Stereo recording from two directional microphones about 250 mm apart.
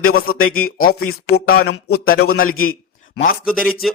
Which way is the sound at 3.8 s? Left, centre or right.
Centre.